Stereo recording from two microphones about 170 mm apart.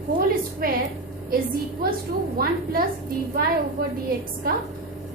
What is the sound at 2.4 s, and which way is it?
Speech, 60° right (ahead or behind).